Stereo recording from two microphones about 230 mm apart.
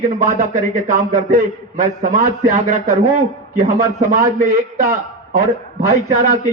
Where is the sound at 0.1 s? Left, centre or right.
Right.